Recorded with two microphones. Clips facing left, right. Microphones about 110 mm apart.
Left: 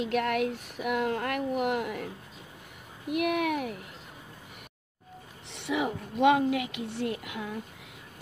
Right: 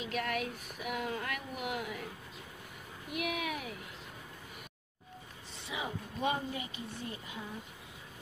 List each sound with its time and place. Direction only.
0.0 s speech: 60° left (ahead or behind)
3.1 s speech: 60° left (ahead or behind)
5.5 s speech: 70° left (ahead or behind)